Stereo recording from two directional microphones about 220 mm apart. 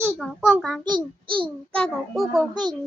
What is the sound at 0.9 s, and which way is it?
Speech, 20° right (ahead or behind).